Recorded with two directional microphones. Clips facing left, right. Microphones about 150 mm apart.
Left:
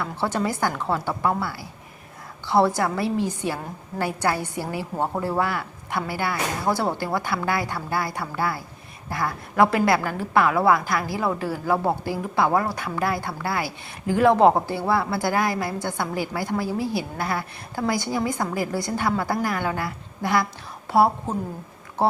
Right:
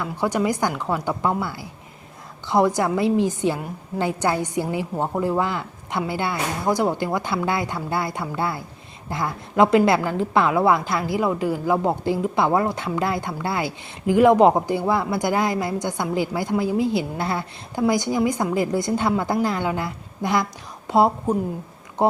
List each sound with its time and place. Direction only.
0.0 s a woman's voice: 15° right (ahead or behind)